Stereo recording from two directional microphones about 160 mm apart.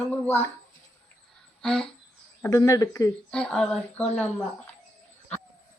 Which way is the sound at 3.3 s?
5° left (ahead or behind).